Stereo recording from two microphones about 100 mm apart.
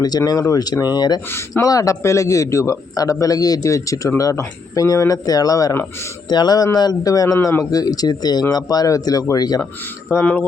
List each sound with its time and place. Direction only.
0.0 s a man's voice: 40° left (ahead or behind)
10.1 s speech: 25° left (ahead or behind)